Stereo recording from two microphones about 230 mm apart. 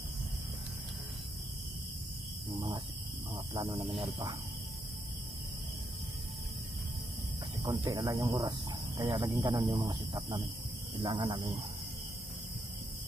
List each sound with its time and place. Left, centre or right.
3.5 s speech: right
7.6 s speech: centre